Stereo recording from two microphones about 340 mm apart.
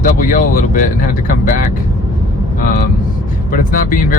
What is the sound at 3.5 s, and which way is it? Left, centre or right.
Speech, left.